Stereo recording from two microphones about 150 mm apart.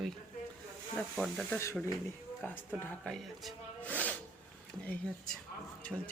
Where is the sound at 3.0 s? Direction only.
5° left (ahead or behind).